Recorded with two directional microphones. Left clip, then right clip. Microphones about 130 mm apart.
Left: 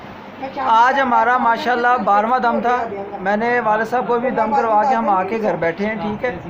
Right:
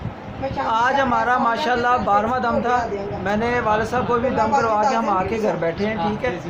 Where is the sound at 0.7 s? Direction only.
20° left (ahead or behind).